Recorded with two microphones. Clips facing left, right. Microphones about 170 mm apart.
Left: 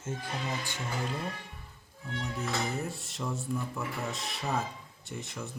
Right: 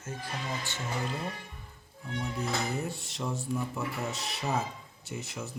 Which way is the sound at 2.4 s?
Centre (ahead or behind).